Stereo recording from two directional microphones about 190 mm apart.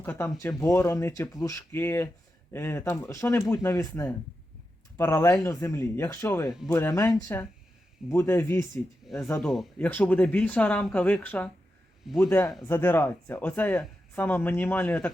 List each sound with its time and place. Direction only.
0.0 s speech: 15° left (ahead or behind)
9.4 s speech: centre (ahead or behind)
12.6 s speech: 10° left (ahead or behind)